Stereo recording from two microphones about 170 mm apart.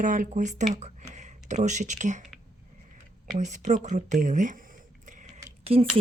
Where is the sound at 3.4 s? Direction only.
45° right (ahead or behind).